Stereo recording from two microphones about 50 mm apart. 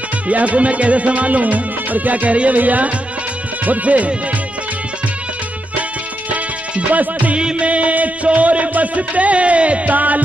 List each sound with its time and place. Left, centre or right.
0.3 s music: right
6.3 s music: right